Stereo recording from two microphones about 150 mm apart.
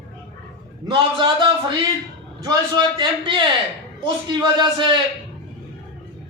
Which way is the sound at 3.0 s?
35° right (ahead or behind).